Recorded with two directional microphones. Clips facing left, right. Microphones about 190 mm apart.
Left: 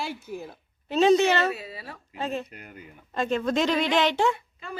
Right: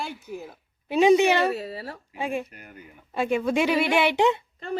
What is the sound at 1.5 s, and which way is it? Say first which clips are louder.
Speech: right 6 dB; 40° right (ahead or behind).